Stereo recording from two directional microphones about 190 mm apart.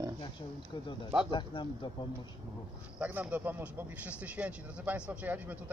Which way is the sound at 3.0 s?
10° right (ahead or behind).